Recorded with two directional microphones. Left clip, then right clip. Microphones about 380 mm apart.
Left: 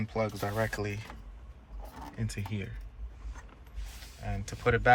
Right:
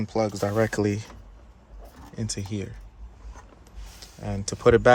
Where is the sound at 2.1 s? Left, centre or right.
Centre.